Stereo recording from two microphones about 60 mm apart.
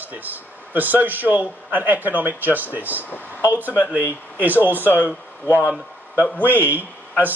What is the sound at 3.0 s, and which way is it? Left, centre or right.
Speech, left.